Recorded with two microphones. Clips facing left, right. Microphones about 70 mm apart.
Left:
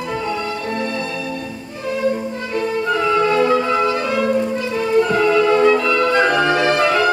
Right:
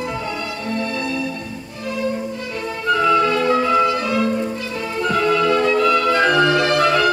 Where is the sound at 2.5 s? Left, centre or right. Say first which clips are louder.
Left 2 dB; left.